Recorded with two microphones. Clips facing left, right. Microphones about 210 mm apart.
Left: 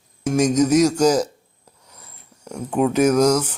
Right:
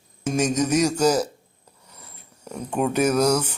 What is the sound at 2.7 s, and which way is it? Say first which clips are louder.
Speech: left 4 dB; 5° left (ahead or behind).